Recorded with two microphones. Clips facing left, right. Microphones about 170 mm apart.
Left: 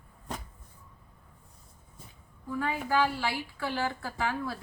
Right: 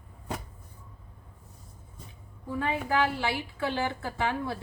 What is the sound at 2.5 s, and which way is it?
A woman's voice, 20° right (ahead or behind).